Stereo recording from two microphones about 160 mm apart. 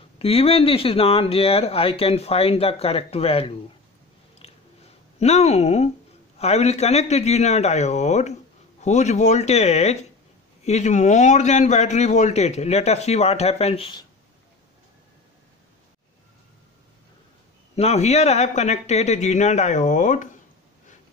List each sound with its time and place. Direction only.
0.2 s speech: 35° left (ahead or behind)
4.4 s chewing: 40° left (ahead or behind)
5.2 s a man's voice: 40° left (ahead or behind)
17.7 s a man's voice: 40° left (ahead or behind)